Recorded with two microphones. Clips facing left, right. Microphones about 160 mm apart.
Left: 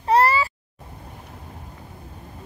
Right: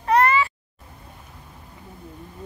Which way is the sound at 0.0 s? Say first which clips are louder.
Even; 30° left (ahead or behind).